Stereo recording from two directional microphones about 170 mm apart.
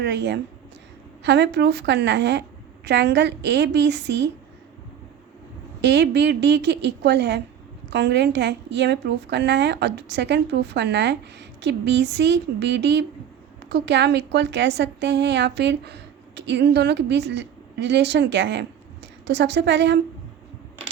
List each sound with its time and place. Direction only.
0.0 s a woman's voice: 90° right
5.8 s a woman's voice: 90° right